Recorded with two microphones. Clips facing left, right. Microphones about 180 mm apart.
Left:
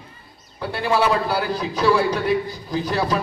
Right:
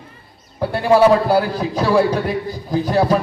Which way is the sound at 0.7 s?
50° right (ahead or behind).